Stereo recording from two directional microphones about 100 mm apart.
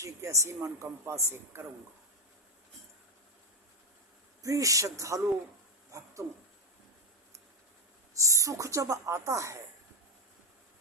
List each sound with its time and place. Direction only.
0.0 s speech: 30° right (ahead or behind)
4.4 s speech: 35° right (ahead or behind)
8.1 s speech: 30° right (ahead or behind)